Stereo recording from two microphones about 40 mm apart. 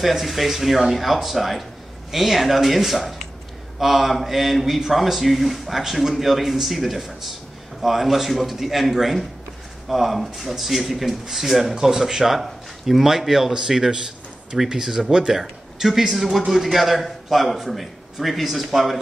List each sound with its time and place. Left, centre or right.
0.0 s a man's voice: centre